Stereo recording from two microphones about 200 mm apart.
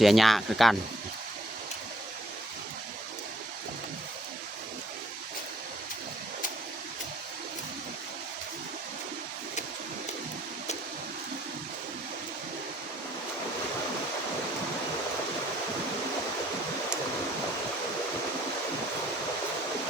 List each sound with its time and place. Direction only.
0.0 s speech: centre (ahead or behind)